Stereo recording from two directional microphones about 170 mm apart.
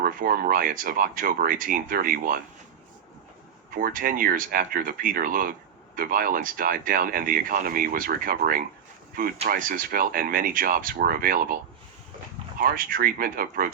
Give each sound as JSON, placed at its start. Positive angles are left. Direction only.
{"t": 0.0, "sound": "speech", "side_deg": -55}
{"t": 3.8, "sound": "speech", "side_deg": -55}
{"t": 12.5, "sound": "speech", "side_deg": -55}